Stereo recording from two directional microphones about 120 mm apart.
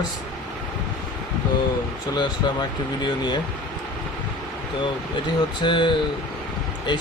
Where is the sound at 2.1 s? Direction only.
35° left (ahead or behind).